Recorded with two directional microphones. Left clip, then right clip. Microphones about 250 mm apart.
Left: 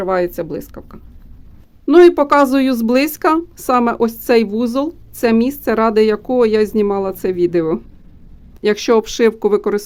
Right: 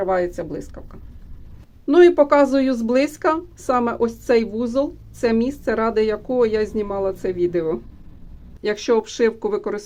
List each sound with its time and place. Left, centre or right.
0.0 s a woman's voice: left